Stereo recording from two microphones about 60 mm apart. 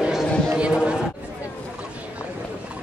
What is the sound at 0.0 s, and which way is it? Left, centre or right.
Chatter, centre.